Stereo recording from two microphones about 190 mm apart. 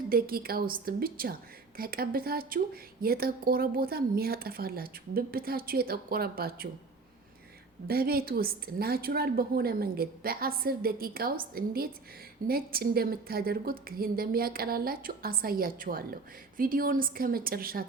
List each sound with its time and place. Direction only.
0.1 s a woman's voice: 50° right (ahead or behind)
7.9 s a woman's voice: 55° right (ahead or behind)